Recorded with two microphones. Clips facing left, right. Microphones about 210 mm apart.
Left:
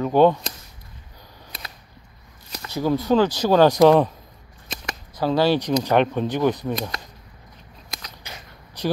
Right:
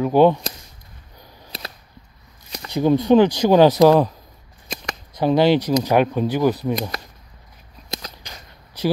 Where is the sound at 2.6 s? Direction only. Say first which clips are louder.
Right 5 dB; 20° right (ahead or behind).